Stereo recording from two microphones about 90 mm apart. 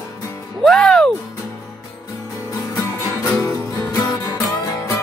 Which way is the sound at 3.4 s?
35° left (ahead or behind).